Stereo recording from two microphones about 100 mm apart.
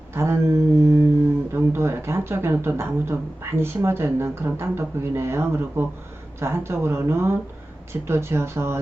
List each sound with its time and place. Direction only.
0.1 s mantra: 25° right (ahead or behind)
1.5 s speech: 25° right (ahead or behind)